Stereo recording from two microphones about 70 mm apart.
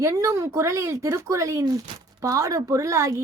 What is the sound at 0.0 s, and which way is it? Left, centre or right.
A woman's voice, right.